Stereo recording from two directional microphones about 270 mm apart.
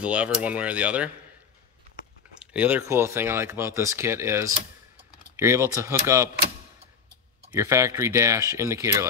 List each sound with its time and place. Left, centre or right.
0.0 s speech: centre
2.4 s speech: centre
7.5 s speech: centre